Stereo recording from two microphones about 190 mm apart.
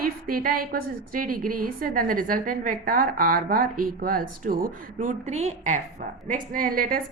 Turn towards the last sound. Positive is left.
turn(degrees=-50)  # may be behind; listen again after turning